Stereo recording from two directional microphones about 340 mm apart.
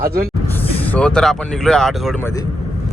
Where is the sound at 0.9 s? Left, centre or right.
Centre.